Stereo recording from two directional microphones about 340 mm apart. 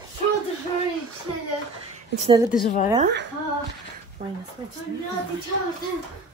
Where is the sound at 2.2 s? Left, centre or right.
Centre.